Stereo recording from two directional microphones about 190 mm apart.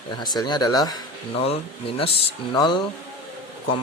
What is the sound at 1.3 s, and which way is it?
Speech, 30° left (ahead or behind).